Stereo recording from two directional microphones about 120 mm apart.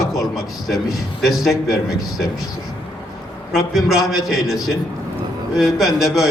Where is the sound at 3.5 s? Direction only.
Centre (ahead or behind).